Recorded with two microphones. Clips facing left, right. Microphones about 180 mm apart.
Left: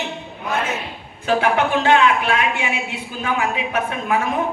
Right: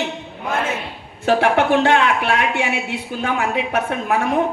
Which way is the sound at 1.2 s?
65° right (ahead or behind).